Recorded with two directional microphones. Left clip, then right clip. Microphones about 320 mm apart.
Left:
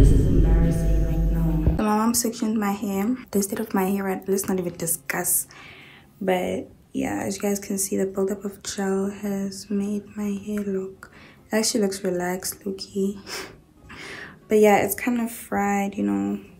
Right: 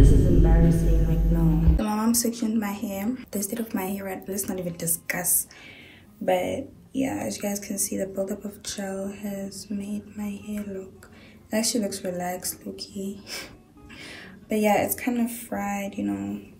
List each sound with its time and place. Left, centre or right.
0.0 s music: centre
1.8 s speech: centre